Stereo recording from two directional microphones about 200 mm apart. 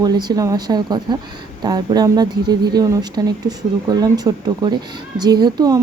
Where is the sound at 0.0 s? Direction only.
20° right (ahead or behind).